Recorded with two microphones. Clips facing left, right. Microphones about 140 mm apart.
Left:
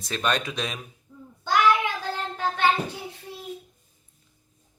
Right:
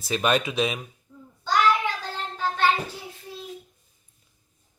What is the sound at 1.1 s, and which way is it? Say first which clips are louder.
Child singing: left 1 dB; 10° left (ahead or behind).